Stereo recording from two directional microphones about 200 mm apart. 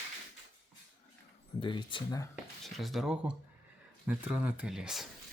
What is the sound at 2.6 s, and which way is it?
Speech, centre (ahead or behind).